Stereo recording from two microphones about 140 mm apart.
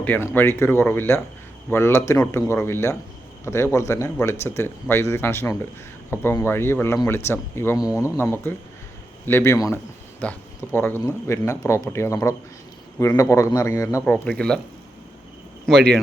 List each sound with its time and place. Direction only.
0.0 s speech: 15° left (ahead or behind)
14.1 s speech: 10° left (ahead or behind)
15.6 s speech: 5° left (ahead or behind)